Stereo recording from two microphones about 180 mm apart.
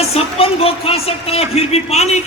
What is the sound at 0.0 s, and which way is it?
Speech, 35° left (ahead or behind).